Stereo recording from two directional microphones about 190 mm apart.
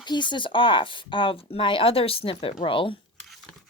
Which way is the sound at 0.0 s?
25° left (ahead or behind).